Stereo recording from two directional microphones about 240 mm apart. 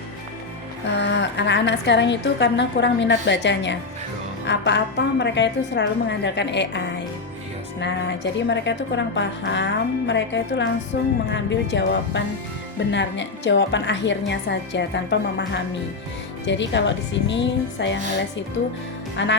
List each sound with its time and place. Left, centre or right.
0.9 s a woman's voice: left
19.1 s music: left